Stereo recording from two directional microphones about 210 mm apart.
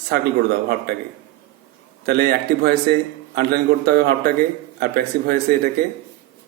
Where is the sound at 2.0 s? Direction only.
45° right (ahead or behind).